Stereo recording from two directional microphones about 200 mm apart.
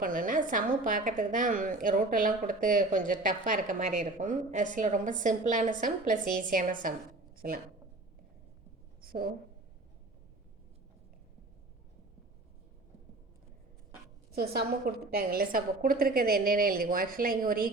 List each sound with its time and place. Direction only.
0.0 s a woman's voice: 40° right (ahead or behind)
9.0 s a sound: 45° right (ahead or behind)
14.3 s a woman's voice: 50° right (ahead or behind)